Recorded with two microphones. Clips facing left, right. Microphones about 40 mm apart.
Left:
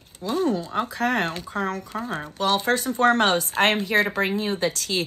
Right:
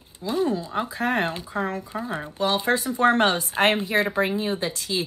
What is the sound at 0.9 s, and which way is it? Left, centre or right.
Speech, right.